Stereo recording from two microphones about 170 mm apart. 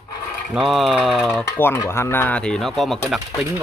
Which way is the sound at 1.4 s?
15° left (ahead or behind).